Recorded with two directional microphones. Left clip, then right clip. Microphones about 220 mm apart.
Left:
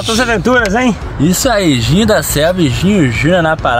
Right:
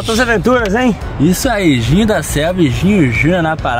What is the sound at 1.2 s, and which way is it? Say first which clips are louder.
Speech: left 2 dB; 5° left (ahead or behind).